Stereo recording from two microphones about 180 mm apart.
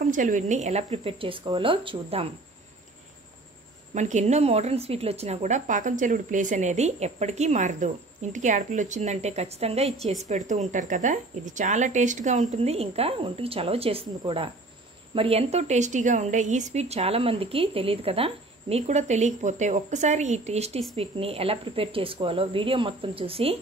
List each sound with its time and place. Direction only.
0.0 s a woman's voice: 45° right (ahead or behind); by 2.2 s 30° right (ahead or behind)
3.9 s a woman's voice: 40° right (ahead or behind)